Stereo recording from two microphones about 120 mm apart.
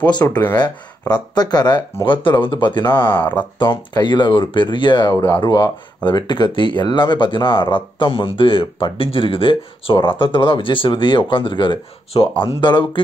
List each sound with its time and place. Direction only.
0.0 s speech: 35° left (ahead or behind)